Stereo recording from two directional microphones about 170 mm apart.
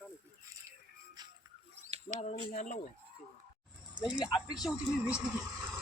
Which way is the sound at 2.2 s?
40° left (ahead or behind).